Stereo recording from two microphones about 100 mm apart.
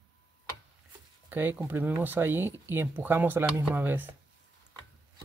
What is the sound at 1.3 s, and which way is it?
Speech, 20° right (ahead or behind).